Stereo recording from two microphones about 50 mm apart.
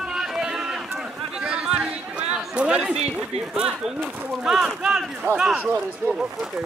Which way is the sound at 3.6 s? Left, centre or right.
Centre.